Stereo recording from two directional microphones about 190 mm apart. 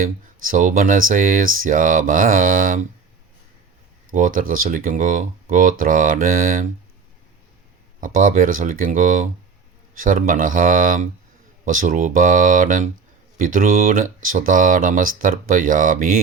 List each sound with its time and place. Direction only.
0.4 s speech: 45° right (ahead or behind)
4.1 s speech: 45° right (ahead or behind)
8.0 s speech: 45° right (ahead or behind)